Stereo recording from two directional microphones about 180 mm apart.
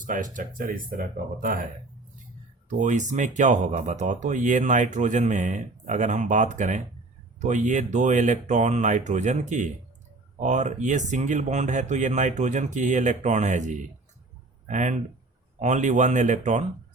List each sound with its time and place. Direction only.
0.0 s speech: 45° right (ahead or behind)
2.6 s speech: 45° right (ahead or behind)